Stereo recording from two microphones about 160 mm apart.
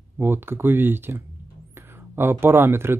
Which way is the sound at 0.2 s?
15° right (ahead or behind).